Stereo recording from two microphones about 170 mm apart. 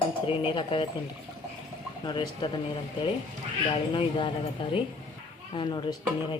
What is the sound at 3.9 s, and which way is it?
Speech, 30° left (ahead or behind).